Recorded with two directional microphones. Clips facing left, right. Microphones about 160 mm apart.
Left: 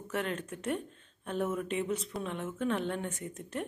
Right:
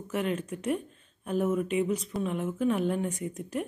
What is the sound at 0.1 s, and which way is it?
A woman's voice, 5° right (ahead or behind).